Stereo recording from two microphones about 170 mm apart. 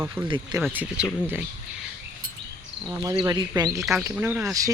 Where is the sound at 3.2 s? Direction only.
25° right (ahead or behind).